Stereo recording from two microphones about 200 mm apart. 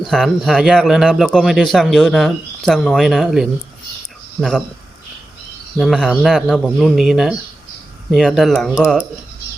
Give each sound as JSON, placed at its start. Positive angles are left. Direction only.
{"t": 0.0, "sound": "a man's voice", "side_deg": 0}
{"t": 5.7, "sound": "a man's voice", "side_deg": 0}